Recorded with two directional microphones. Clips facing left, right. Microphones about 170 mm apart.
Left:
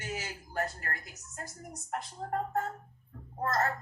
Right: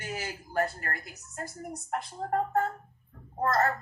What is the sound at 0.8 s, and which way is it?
Speech, 55° right (ahead or behind).